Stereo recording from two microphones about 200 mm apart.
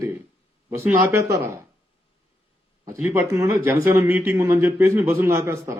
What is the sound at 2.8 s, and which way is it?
Speech, 15° right (ahead or behind).